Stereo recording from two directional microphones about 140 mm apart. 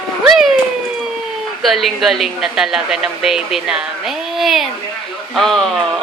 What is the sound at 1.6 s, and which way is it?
A woman's voice, centre (ahead or behind).